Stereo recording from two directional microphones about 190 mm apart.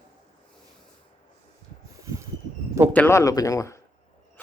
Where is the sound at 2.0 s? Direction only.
15° right (ahead or behind).